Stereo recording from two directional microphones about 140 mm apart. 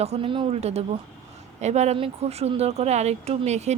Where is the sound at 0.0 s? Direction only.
45° right (ahead or behind).